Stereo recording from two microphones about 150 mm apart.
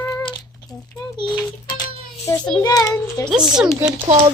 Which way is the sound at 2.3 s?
20° left (ahead or behind).